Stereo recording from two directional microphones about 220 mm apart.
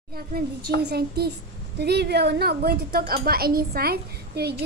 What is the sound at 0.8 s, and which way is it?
A child's voice, 45° right (ahead or behind).